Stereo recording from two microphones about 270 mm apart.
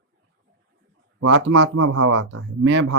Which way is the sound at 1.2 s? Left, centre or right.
Right.